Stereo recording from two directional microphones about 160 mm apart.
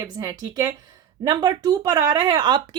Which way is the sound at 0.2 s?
25° right (ahead or behind).